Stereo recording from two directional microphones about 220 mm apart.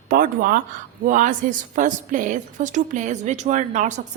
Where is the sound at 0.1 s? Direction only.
40° right (ahead or behind).